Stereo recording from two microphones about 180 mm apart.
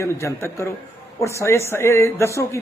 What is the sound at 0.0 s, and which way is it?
Speech, 15° left (ahead or behind).